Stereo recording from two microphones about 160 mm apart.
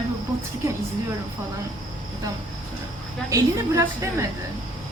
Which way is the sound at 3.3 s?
20° right (ahead or behind).